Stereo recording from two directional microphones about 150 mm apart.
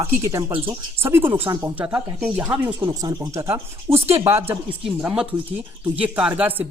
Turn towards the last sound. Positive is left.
turn(degrees=-10)  # may be behind; listen again after turning